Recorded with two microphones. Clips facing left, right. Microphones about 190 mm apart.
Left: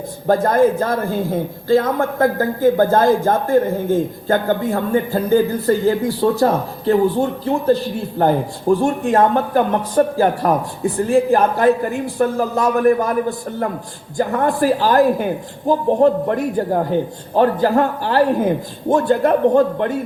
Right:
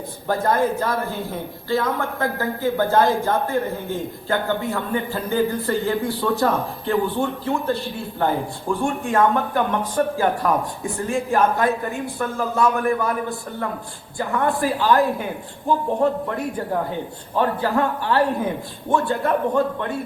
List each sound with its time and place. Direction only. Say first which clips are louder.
0.3 s a man's voice: left 6 dB; 45° left (ahead or behind)
14.2 s speech: left 5 dB; 40° left (ahead or behind)